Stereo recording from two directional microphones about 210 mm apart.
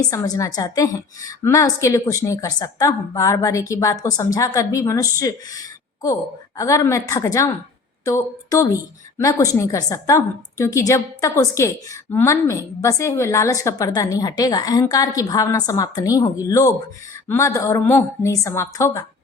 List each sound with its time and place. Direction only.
0.0 s a woman's voice: 15° left (ahead or behind)